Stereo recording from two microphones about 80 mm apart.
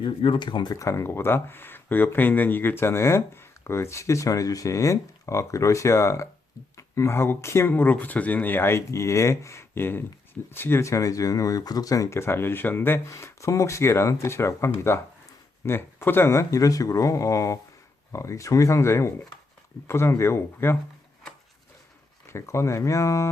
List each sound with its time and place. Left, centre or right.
0.0 s speech: left
0.7 s speech: left
7.7 s speech: left
12.1 s speech: left
13.1 s speech: left
22.3 s speech: left